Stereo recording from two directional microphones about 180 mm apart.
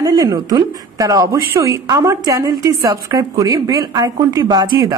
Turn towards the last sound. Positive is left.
turn(degrees=-20)  # may be behind; listen again after turning